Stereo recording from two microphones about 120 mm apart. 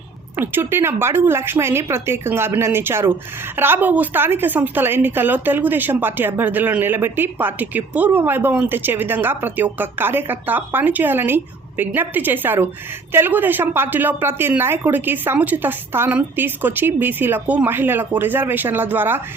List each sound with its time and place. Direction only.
0.3 s a woman's voice: 20° right (ahead or behind)